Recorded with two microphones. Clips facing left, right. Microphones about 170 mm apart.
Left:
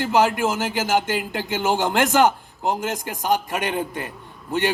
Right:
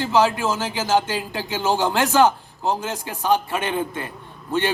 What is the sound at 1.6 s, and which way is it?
Speech, 20° left (ahead or behind).